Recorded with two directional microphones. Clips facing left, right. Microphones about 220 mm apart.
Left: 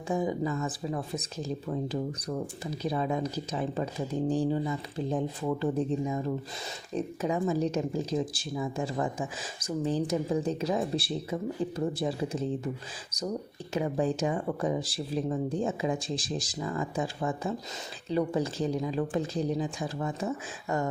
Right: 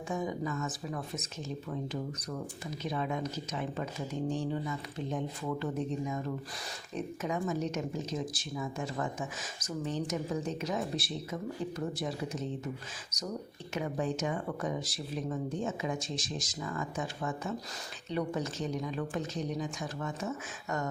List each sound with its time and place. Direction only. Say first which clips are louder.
0.1 s speech: left 6 dB; 30° left (ahead or behind)
13.7 s speech: left 5 dB; 30° left (ahead or behind)